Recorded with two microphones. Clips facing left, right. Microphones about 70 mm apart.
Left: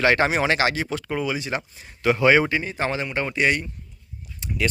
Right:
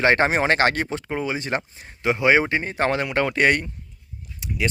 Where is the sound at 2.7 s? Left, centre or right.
Right.